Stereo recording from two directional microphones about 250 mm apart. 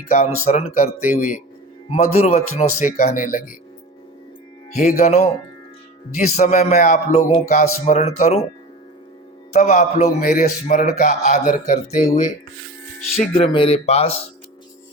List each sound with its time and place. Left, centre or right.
0.4 s a man's voice: left
4.7 s a man's voice: left
9.5 s a man's voice: left
13.3 s a man's voice: left